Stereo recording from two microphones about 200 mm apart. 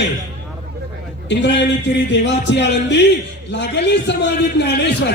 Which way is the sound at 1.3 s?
60° left (ahead or behind).